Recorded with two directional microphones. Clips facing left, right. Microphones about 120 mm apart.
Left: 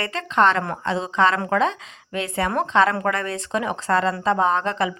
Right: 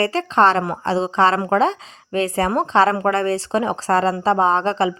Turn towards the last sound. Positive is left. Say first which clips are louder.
# right 3 dB
turn(degrees=-30)  # may be behind; listen again after turning